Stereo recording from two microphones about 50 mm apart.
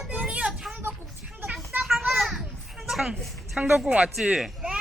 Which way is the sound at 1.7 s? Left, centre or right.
Right.